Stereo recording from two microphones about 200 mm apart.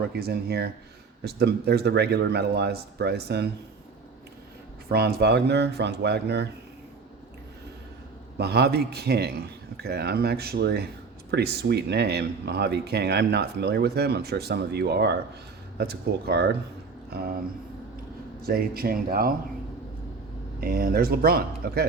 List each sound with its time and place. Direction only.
0.2 s speech: 50° right (ahead or behind)
4.9 s speech: 55° right (ahead or behind)
8.4 s speech: 55° right (ahead or behind)
18.4 s speech: 50° right (ahead or behind)
20.6 s speech: 45° right (ahead or behind)